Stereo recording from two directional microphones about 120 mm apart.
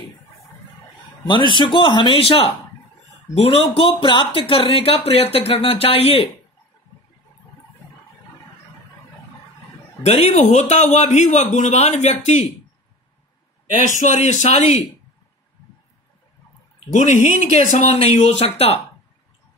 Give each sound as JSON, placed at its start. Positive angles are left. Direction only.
{"t": 1.2, "sound": "speech", "side_deg": 40}
{"t": 10.0, "sound": "speech", "side_deg": 60}
{"t": 13.8, "sound": "speech", "side_deg": 90}
{"t": 16.9, "sound": "speech", "side_deg": 90}
{"t": 17.9, "sound": "speech", "side_deg": 60}